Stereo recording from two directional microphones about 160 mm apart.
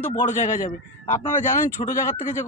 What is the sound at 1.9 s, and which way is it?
Speech, 50° left (ahead or behind).